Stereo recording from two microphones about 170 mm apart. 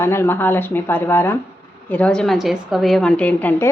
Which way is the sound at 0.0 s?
15° left (ahead or behind).